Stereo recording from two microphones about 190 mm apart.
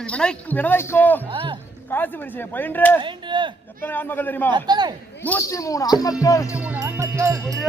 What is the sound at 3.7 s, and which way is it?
Speech, 10° left (ahead or behind).